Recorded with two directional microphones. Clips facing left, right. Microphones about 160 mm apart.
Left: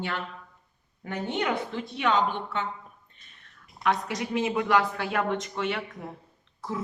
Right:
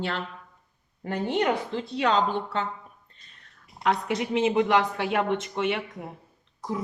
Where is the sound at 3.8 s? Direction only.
30° right (ahead or behind).